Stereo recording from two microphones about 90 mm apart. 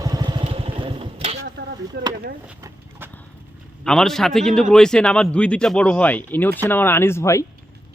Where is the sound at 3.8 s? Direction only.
5° left (ahead or behind); by 7.4 s 30° left (ahead or behind).